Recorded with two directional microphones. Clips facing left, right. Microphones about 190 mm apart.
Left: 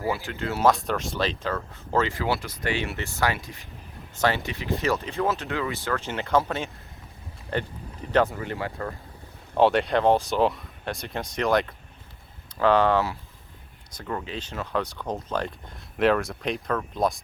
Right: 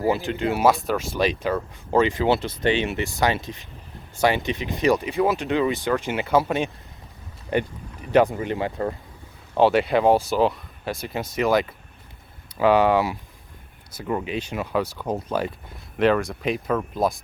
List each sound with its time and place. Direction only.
0.1 s speech: 20° right (ahead or behind)
0.7 s speech: 5° right (ahead or behind); by 9.0 s 20° right (ahead or behind)
9.6 s speech: centre (ahead or behind)